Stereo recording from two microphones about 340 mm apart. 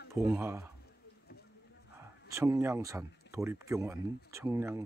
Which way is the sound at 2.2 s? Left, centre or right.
Centre.